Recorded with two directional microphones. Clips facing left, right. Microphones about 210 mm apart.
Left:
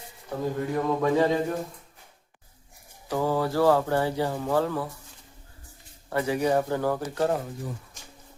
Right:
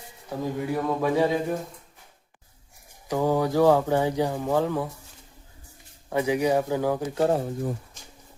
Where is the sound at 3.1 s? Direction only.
15° right (ahead or behind).